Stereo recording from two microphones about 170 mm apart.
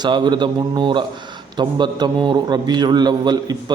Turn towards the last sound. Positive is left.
turn(degrees=-25)  # may be behind; listen again after turning